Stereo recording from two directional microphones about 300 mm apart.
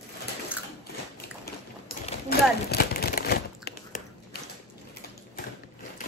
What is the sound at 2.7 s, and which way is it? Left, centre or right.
Crumpling, left.